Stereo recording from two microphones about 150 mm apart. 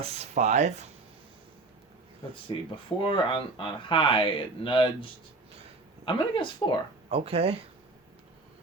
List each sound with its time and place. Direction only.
0.0 s speech: 45° right (ahead or behind)
2.5 s speech: 25° left (ahead or behind)
6.1 s speech: 35° left (ahead or behind)
7.1 s speech: 40° right (ahead or behind)